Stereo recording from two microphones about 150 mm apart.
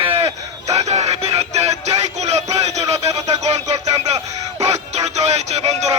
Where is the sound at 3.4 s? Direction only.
45° right (ahead or behind).